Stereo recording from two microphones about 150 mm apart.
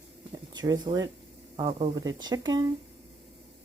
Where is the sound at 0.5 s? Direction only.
25° right (ahead or behind).